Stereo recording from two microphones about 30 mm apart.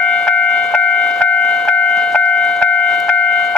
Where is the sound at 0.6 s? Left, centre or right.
Left.